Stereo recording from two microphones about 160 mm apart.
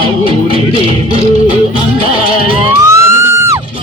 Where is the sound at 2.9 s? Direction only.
20° right (ahead or behind).